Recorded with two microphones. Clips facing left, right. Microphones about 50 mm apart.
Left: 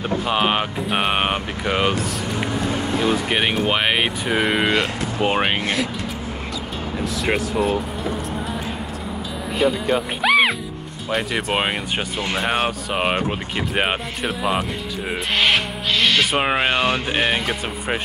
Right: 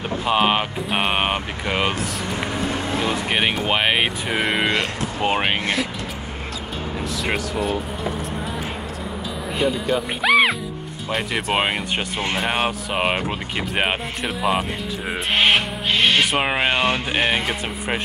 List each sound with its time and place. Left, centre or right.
0.3 s speech: centre
3.3 s speech: centre
9.6 s speech: centre
10.2 s music: centre
11.1 s speech: centre
15.3 s owl: right
16.3 s speech: centre